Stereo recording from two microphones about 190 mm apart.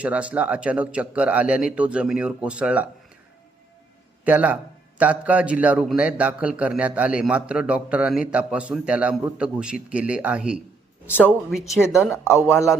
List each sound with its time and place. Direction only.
0.0 s speech: 5° right (ahead or behind)
4.2 s a man's voice: 10° right (ahead or behind)
12.0 s speech: 15° left (ahead or behind)